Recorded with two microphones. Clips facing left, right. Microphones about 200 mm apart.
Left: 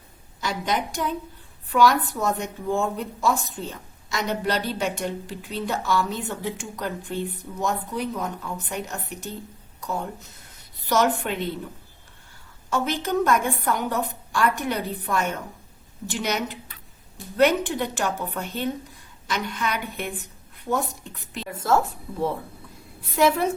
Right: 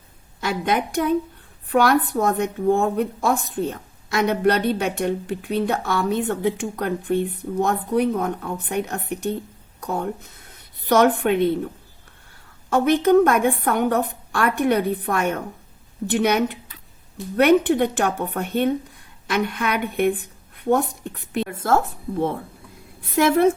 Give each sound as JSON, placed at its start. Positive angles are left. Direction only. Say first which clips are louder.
{"t": 0.3, "sound": "a woman's voice", "louder": "right 4 dB", "side_deg": -55}
{"t": 12.7, "sound": "a woman's voice", "louder": "right 9 dB", "side_deg": -60}
{"t": 23.2, "sound": "a woman's voice", "louder": "right 3 dB", "side_deg": -55}